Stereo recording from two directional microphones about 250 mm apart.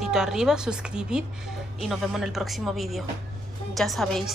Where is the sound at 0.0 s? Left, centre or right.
Centre.